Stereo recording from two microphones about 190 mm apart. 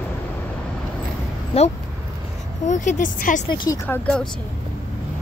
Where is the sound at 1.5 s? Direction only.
30° left (ahead or behind).